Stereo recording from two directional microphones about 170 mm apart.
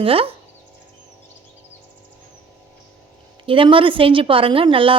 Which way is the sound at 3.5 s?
30° right (ahead or behind).